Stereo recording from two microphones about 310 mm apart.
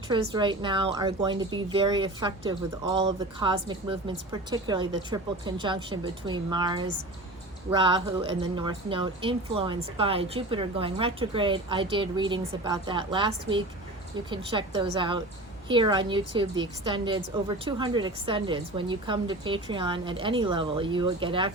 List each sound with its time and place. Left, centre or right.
0.1 s speech: centre